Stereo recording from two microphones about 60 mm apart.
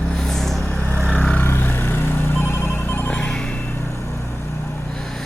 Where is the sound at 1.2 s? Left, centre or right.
Left.